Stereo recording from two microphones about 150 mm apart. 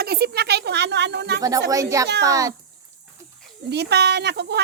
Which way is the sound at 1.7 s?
20° right (ahead or behind).